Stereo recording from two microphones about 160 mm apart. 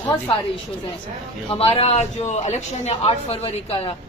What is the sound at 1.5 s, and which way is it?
A woman's voice, 35° left (ahead or behind).